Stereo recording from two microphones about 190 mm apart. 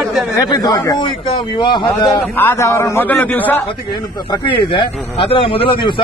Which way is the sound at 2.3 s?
10° left (ahead or behind).